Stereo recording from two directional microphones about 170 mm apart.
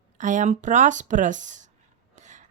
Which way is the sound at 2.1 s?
45° right (ahead or behind).